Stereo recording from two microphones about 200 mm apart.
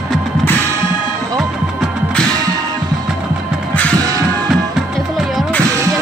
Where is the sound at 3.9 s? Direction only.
15° right (ahead or behind).